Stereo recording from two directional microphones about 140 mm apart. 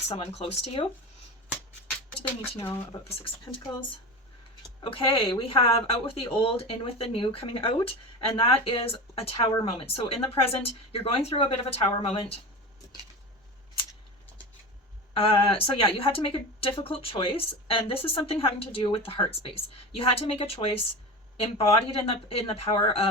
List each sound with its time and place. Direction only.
0.1 s speech: 45° left (ahead or behind)
2.6 s speech: 15° left (ahead or behind)
4.8 s speech: 40° left (ahead or behind)
15.1 s speech: 40° left (ahead or behind)